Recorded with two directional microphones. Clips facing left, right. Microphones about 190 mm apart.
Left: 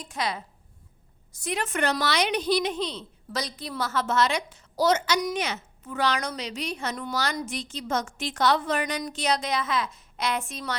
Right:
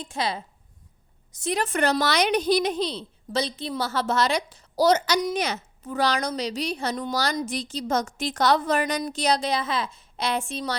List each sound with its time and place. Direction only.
0.0 s a woman's voice: 30° right (ahead or behind)
1.5 s a woman's voice: 35° right (ahead or behind)